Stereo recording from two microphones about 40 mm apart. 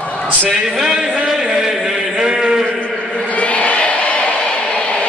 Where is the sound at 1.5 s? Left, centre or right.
Centre.